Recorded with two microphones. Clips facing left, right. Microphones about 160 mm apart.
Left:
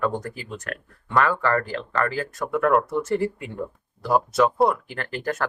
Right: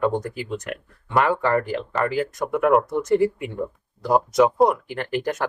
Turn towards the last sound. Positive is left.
turn(degrees=-20)  # may be behind; listen again after turning